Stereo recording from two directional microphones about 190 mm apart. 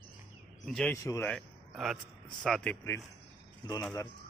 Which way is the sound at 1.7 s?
Centre (ahead or behind).